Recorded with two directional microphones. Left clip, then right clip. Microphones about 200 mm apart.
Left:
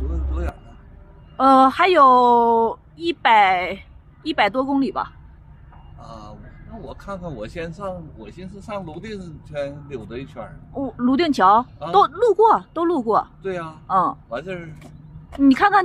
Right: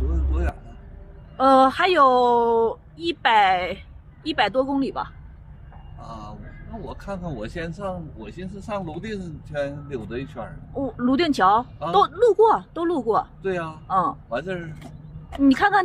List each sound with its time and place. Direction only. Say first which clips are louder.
0.1 s a sound: right 1 dB; 20° left (ahead or behind)
1.3 s speech: left 2 dB; 30° left (ahead or behind)
5.9 s a sound: right 1 dB; 20° left (ahead or behind)
6.8 s a man's voice: left 1 dB; 20° left (ahead or behind)
13.4 s a man's voice: right 1 dB; 20° left (ahead or behind)
13.8 s speech: left 3 dB; 35° left (ahead or behind)
14.3 s a man's voice: right 1 dB; 25° left (ahead or behind)